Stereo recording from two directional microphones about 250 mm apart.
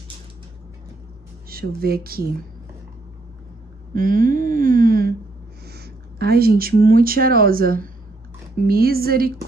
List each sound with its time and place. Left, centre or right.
1.5 s speech: right
3.9 s speech: right